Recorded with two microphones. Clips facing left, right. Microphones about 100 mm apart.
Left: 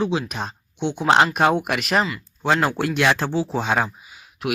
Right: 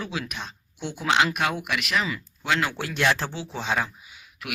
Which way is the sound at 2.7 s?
65° left (ahead or behind).